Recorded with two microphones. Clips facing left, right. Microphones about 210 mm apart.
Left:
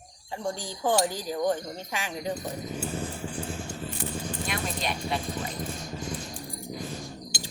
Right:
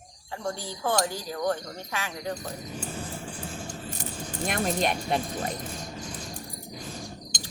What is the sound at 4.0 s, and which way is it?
Speech, 50° right (ahead or behind).